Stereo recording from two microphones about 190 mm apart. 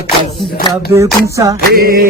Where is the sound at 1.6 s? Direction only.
50° right (ahead or behind).